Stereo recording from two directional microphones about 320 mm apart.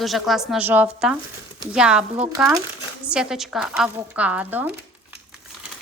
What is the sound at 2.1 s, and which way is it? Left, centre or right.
Speech, centre.